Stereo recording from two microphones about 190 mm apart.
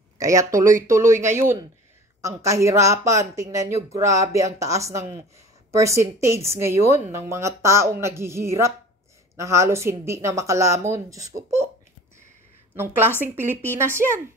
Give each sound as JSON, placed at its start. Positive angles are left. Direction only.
{"t": 0.2, "sound": "speech", "side_deg": -15}
{"t": 12.7, "sound": "speech", "side_deg": -10}